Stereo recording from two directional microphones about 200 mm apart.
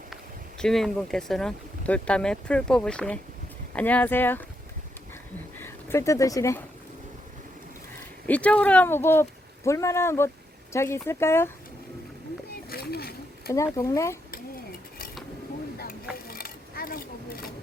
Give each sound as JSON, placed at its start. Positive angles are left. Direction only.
{"t": 0.6, "sound": "speech", "side_deg": 0}
{"t": 5.5, "sound": "speech", "side_deg": 10}
{"t": 8.3, "sound": "speech", "side_deg": 5}
{"t": 12.7, "sound": "a sound", "side_deg": 50}
{"t": 13.7, "sound": "speech", "side_deg": 15}
{"t": 16.3, "sound": "a sound", "side_deg": 45}